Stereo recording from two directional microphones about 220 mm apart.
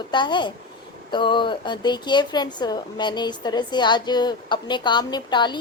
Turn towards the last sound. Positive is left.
turn(degrees=20)  # may be behind; listen again after turning